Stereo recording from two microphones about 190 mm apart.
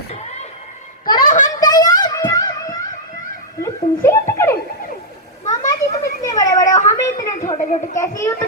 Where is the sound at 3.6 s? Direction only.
15° left (ahead or behind).